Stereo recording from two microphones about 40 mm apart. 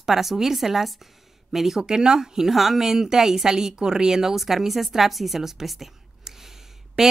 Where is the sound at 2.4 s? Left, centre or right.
Centre.